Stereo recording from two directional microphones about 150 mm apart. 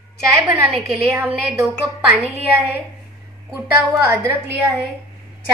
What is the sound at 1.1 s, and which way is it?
Speech, 20° right (ahead or behind).